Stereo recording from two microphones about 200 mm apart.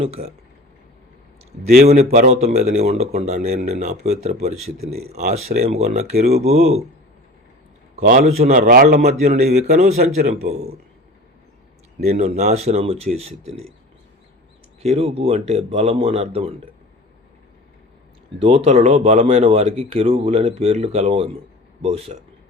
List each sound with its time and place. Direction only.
0.0 s speech: 30° right (ahead or behind)
1.7 s speech: 35° right (ahead or behind)
7.9 s a man's voice: 45° right (ahead or behind)
11.9 s speech: 35° right (ahead or behind)
14.8 s speech: 30° right (ahead or behind)
18.3 s a man's voice: 30° right (ahead or behind)